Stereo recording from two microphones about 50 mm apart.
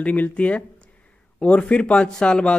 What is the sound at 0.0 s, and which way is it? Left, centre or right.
Speech, left.